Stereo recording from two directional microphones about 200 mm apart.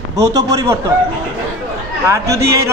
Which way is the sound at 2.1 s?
15° right (ahead or behind).